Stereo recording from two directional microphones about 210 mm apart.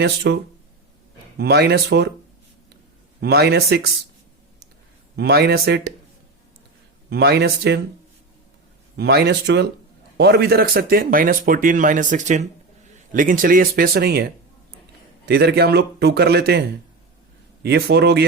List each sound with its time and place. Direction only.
0.0 s speech: 55° right (ahead or behind)
1.4 s a man's voice: 50° right (ahead or behind)
3.2 s a man's voice: 50° right (ahead or behind)
5.1 s a man's voice: 50° right (ahead or behind)
7.1 s a man's voice: 50° right (ahead or behind)
9.0 s a man's voice: 50° right (ahead or behind)
15.3 s a man's voice: 50° right (ahead or behind)